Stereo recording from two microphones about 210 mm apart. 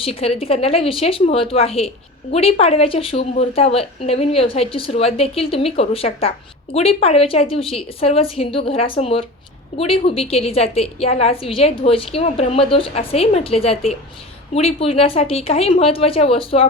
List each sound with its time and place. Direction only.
0.0 s a woman's voice: 30° left (ahead or behind)